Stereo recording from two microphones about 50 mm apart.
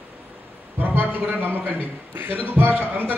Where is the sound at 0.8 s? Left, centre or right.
Right.